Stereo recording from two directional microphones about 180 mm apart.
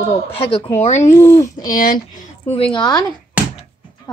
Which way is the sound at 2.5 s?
25° left (ahead or behind).